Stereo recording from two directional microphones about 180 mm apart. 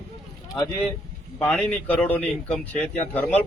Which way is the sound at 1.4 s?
10° left (ahead or behind).